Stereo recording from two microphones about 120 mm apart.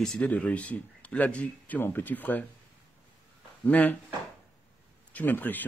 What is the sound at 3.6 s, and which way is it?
Speech, 15° left (ahead or behind).